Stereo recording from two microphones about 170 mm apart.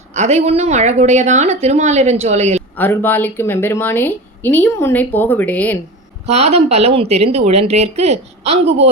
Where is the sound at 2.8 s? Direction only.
10° left (ahead or behind).